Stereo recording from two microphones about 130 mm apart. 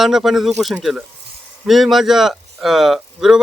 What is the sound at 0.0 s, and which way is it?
Speech, 5° right (ahead or behind).